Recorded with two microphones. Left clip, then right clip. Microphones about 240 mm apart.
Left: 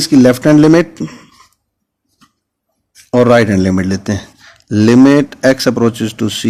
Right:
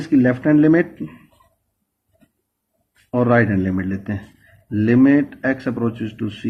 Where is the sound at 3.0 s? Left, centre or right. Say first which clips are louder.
Left 8 dB; left.